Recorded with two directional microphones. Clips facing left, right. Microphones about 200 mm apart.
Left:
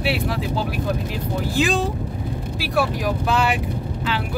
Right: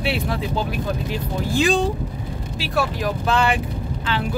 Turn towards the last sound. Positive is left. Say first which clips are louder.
# right 1 dB
turn(degrees=5)  # may be behind; listen again after turning